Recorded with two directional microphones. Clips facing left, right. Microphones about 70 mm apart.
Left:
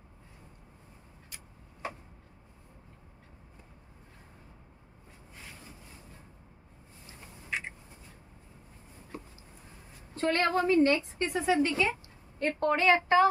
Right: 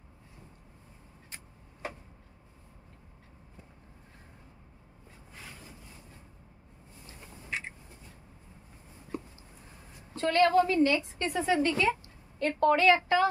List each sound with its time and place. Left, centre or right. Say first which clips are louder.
10.2 s a woman's voice: right 3 dB; left
11.1 s a woman's voice: left 1 dB; centre
12.4 s a woman's voice: right 3 dB; left